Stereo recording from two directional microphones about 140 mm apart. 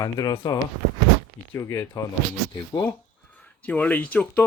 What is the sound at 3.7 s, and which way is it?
Speech, 10° left (ahead or behind).